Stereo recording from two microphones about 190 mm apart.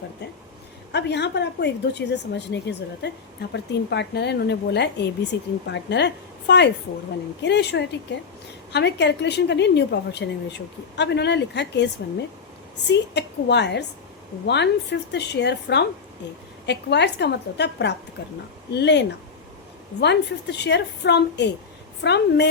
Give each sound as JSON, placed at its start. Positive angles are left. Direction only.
{"t": 0.9, "sound": "speech", "side_deg": 65}
{"t": 12.9, "sound": "speech", "side_deg": 65}